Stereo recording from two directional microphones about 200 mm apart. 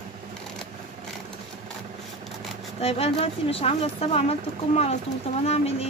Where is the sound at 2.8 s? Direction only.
30° left (ahead or behind).